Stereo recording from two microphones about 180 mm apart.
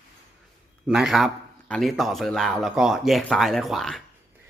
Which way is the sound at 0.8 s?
Centre (ahead or behind).